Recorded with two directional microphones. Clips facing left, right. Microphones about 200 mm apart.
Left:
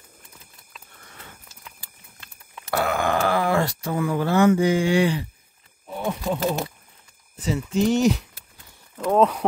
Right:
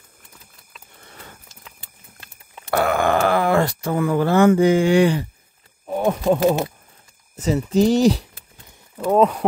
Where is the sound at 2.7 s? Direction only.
55° right (ahead or behind).